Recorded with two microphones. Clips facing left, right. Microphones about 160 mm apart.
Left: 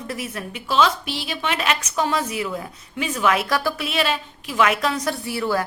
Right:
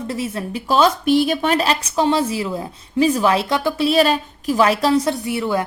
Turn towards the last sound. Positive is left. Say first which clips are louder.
# right 3 dB
turn(degrees=-20)  # may be behind; listen again after turning